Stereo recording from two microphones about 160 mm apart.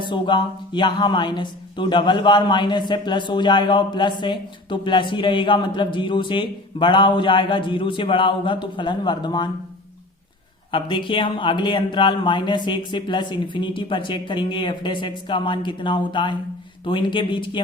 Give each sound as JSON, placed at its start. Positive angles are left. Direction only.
{"t": 0.0, "sound": "speech", "side_deg": 30}
{"t": 10.7, "sound": "speech", "side_deg": 30}